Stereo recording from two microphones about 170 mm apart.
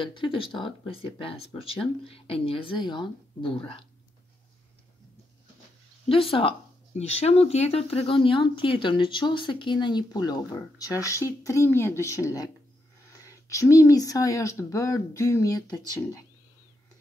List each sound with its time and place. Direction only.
0.0 s speech: 30° left (ahead or behind)
6.0 s speech: 30° left (ahead or behind)